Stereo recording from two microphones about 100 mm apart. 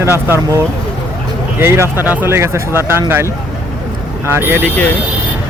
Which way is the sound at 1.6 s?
25° right (ahead or behind).